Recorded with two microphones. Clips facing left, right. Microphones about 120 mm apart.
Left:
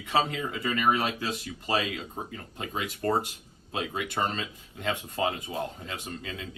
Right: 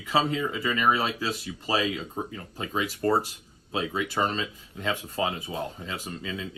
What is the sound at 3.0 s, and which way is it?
Speech, 25° right (ahead or behind).